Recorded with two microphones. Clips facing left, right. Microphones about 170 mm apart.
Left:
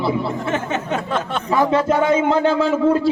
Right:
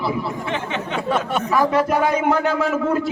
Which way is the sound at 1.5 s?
25° left (ahead or behind).